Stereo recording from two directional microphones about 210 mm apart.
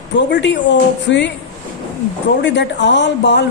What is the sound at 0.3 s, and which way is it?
Speech, 55° left (ahead or behind).